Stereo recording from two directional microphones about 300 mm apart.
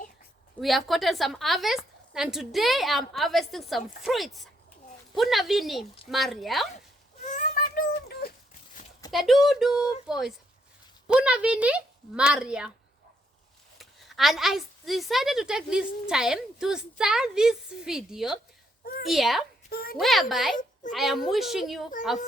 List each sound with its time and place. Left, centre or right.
0.6 s a woman's voice: centre
7.3 s child singing: left
8.8 s a sound: centre
9.1 s a woman's voice: centre
13.7 s a woman's voice: centre
19.7 s a woman's voice: left
20.0 s a woman's voice: centre